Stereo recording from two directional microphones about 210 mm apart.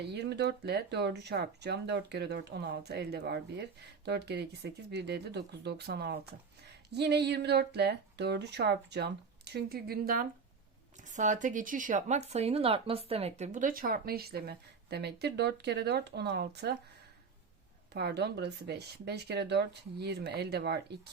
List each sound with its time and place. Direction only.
0.0 s speech: 50° right (ahead or behind)
17.9 s speech: 50° right (ahead or behind)